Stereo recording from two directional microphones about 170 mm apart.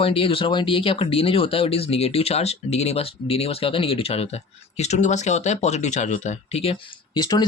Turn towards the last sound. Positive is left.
turn(degrees=25)  # may be behind; listen again after turning